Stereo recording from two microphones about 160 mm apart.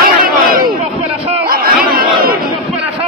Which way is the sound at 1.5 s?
70° right (ahead or behind).